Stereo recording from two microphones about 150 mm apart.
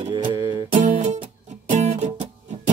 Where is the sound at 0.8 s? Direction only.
55° right (ahead or behind).